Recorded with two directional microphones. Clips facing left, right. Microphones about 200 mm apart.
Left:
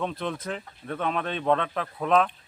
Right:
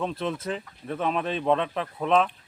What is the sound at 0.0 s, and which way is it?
Speech, centre (ahead or behind).